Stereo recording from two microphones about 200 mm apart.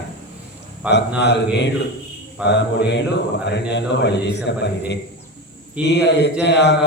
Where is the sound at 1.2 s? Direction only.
60° left (ahead or behind).